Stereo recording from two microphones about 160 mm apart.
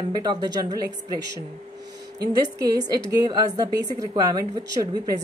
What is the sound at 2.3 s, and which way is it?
A woman's voice, 25° right (ahead or behind).